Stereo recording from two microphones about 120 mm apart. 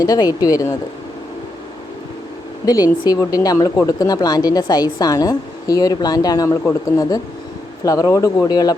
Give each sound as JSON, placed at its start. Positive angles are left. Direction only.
{"t": 0.0, "sound": "speech", "side_deg": 30}
{"t": 2.6, "sound": "speech", "side_deg": 30}